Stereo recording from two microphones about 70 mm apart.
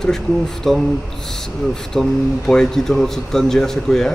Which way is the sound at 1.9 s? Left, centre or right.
Centre.